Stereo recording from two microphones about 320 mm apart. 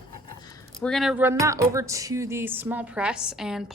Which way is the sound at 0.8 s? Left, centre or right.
Centre.